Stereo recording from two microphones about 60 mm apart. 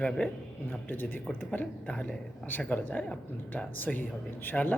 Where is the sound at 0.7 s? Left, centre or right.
Left.